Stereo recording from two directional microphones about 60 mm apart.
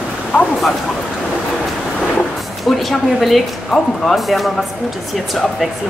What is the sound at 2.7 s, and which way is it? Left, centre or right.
Speech, centre.